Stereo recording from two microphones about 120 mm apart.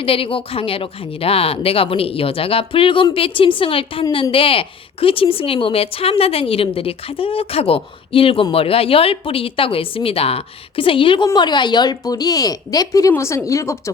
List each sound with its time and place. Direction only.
0.0 s speech: 50° left (ahead or behind); by 13.9 s 25° left (ahead or behind)